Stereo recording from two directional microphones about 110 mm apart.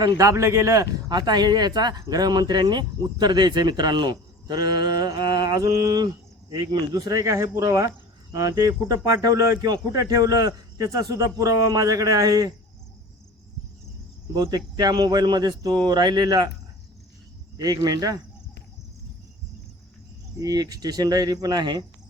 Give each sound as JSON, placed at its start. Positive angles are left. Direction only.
{"t": 0.0, "sound": "speech", "side_deg": -30}
{"t": 14.3, "sound": "speech", "side_deg": -35}
{"t": 17.6, "sound": "speech", "side_deg": -35}
{"t": 20.4, "sound": "speech", "side_deg": -35}